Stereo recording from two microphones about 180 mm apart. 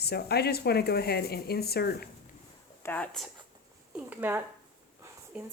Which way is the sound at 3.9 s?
10° right (ahead or behind).